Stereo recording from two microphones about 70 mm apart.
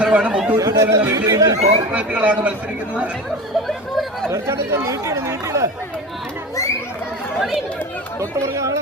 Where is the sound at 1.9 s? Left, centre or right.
Centre.